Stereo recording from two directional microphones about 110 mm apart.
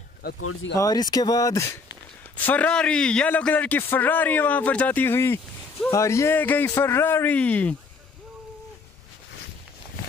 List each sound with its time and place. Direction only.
0.7 s speech: 35° left (ahead or behind)
2.3 s a man's voice: 15° left (ahead or behind)